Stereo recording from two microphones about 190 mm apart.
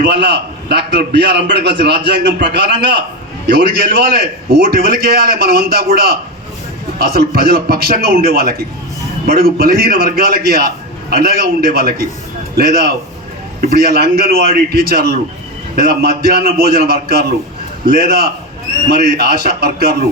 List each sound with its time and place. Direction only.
0.0 s a man's voice: 65° right (ahead or behind)
4.5 s a man's voice: 50° right (ahead or behind)